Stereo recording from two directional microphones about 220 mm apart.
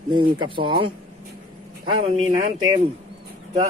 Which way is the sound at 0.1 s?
20° right (ahead or behind).